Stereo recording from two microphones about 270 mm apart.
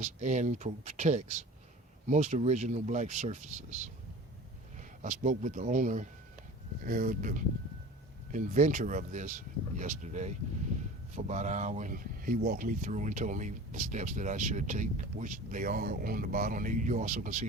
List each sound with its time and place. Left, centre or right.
0.0 s speech: right